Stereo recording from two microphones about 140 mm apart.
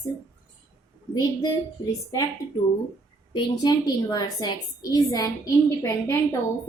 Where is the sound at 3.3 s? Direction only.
30° left (ahead or behind).